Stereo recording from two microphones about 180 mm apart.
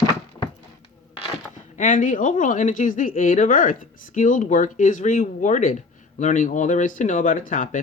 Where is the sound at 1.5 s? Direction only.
45° left (ahead or behind).